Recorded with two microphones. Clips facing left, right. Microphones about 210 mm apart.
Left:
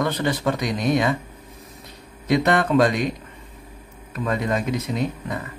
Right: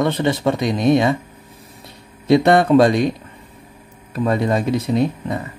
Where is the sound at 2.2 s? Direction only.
30° right (ahead or behind).